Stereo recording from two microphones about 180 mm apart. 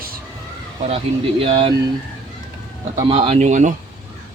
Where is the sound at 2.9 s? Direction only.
30° right (ahead or behind).